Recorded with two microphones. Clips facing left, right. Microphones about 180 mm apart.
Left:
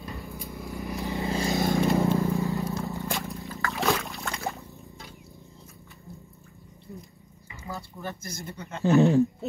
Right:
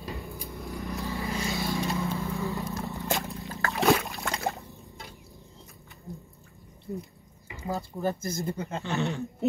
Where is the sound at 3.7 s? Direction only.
15° right (ahead or behind).